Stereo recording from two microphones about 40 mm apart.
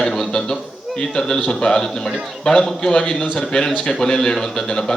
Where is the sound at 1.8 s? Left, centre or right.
Centre.